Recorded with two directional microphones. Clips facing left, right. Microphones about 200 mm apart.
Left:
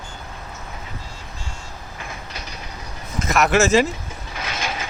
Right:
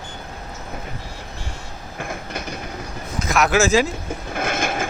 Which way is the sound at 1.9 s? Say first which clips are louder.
Right 8 dB; 55° right (ahead or behind).